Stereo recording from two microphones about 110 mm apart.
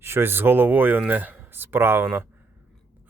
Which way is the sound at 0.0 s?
20° right (ahead or behind).